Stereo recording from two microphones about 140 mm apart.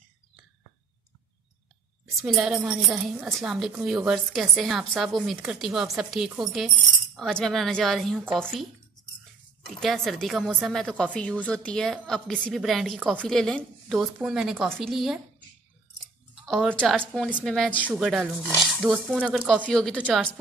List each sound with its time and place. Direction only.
2.2 s a woman's voice: centre (ahead or behind)
9.8 s a woman's voice: 5° left (ahead or behind)
16.4 s a woman's voice: 5° left (ahead or behind)